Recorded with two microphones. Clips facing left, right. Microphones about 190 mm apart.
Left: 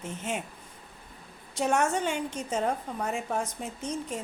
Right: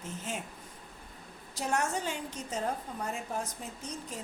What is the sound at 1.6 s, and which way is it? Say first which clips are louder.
A woman's voice: left 6 dB; 80° left.